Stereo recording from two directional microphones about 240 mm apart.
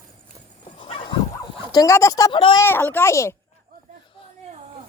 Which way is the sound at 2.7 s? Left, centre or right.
Centre.